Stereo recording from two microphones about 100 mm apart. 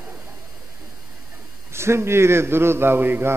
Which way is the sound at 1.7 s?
25° right (ahead or behind).